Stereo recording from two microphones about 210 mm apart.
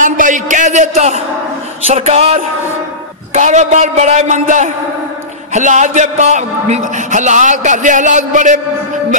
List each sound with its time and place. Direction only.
0.0 s a man's voice: 35° right (ahead or behind)